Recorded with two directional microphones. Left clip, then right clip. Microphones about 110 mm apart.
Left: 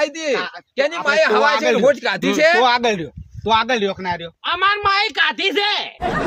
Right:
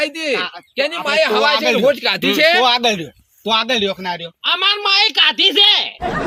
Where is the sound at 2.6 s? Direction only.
40° left (ahead or behind); by 4.3 s 20° left (ahead or behind).